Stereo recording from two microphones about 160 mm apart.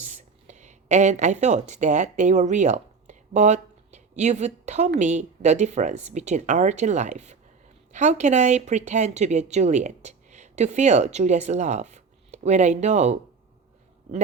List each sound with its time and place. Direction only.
0.0 s speech: 50° right (ahead or behind)